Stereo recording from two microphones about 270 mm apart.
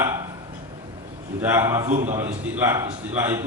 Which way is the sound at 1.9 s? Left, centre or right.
Right.